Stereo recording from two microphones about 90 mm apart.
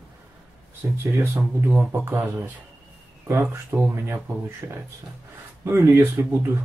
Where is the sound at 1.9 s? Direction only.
25° right (ahead or behind).